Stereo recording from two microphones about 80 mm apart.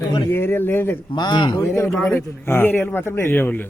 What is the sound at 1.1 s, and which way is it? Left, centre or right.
Speech, left.